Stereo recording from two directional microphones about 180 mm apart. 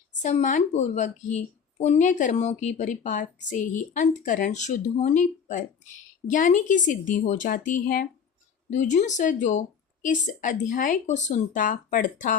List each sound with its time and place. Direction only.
0.2 s a woman's voice: 40° left (ahead or behind)